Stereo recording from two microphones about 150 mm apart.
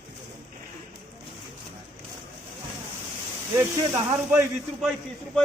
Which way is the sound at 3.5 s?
15° right (ahead or behind).